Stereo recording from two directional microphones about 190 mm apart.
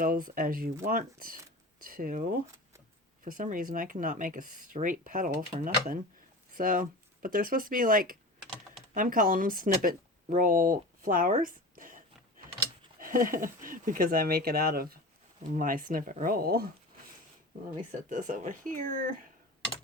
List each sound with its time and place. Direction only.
0.0 s speech: 45° right (ahead or behind)
18.1 s speech: 45° right (ahead or behind)